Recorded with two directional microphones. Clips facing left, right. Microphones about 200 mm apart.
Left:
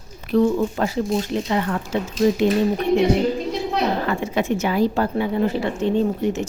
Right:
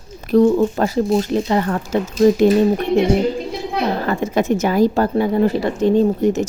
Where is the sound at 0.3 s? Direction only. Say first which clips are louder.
Right 5 dB; 45° right (ahead or behind).